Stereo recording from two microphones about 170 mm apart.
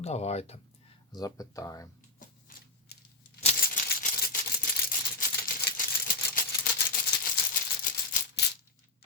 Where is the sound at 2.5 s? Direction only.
55° left (ahead or behind).